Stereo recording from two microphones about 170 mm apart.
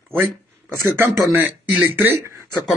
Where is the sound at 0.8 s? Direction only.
10° right (ahead or behind).